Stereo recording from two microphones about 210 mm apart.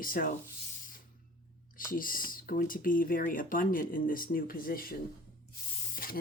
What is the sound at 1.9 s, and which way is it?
Speech, 40° left (ahead or behind).